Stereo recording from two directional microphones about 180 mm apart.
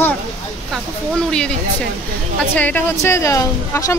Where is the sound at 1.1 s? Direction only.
5° left (ahead or behind).